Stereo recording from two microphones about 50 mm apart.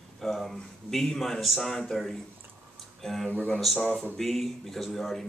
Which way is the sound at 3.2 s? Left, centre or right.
Left.